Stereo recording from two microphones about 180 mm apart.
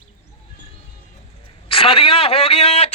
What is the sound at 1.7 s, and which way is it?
Speech, 30° left (ahead or behind).